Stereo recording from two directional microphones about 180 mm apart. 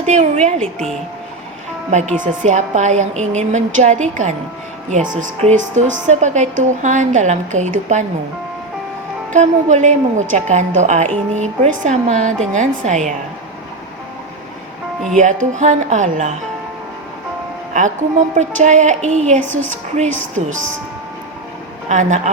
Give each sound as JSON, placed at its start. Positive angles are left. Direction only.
{"t": 0.0, "sound": "a woman's voice", "side_deg": -40}
{"t": 1.9, "sound": "a woman's voice", "side_deg": -40}
{"t": 9.3, "sound": "a woman's voice", "side_deg": -40}
{"t": 15.1, "sound": "a woman's voice", "side_deg": -45}
{"t": 18.3, "sound": "a woman's voice", "side_deg": -40}
{"t": 21.8, "sound": "a woman's voice", "side_deg": -40}